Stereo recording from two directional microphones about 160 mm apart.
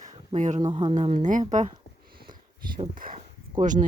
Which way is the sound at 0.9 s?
50° right (ahead or behind).